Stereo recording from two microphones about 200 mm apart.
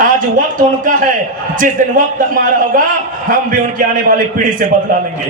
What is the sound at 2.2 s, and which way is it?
A man's voice, 40° right (ahead or behind).